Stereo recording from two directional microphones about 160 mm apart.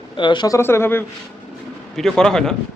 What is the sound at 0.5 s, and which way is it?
Speech, 15° left (ahead or behind).